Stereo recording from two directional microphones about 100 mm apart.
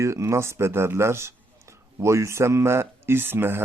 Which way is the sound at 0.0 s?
30° right (ahead or behind).